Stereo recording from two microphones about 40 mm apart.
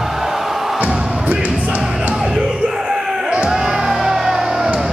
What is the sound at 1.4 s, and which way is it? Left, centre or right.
Music, right.